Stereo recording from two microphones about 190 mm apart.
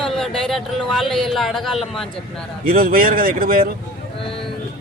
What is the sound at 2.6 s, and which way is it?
Speech, 50° right (ahead or behind).